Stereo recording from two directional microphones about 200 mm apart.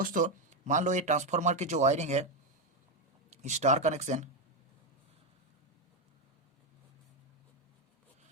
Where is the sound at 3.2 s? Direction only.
35° right (ahead or behind).